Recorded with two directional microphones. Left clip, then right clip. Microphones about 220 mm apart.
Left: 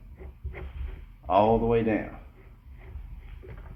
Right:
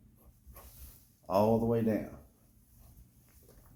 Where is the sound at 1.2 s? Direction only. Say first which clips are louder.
Left 7 dB; 60° right (ahead or behind).